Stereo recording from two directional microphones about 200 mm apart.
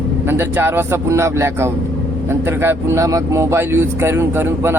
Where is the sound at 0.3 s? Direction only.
10° right (ahead or behind).